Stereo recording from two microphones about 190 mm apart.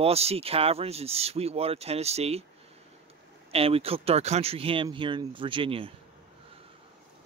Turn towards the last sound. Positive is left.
turn(degrees=-30)  # may be behind; listen again after turning